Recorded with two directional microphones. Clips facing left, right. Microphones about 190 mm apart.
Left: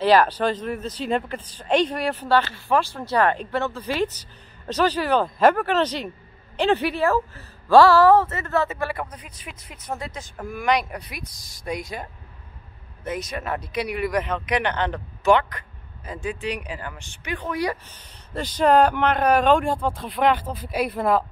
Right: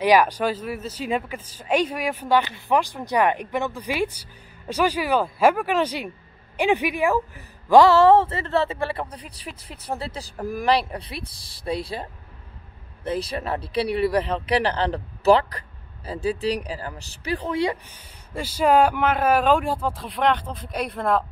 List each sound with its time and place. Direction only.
0.0 s speech: 10° right (ahead or behind)
17.8 s speech: 10° right (ahead or behind)